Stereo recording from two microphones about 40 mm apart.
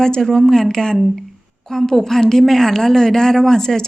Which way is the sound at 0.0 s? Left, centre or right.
Centre.